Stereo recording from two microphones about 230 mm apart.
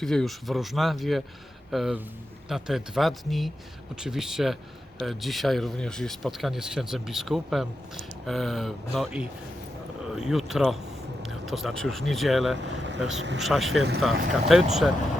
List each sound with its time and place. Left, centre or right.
0.0 s speech: centre
12.5 s speech: right
13.4 s speech: centre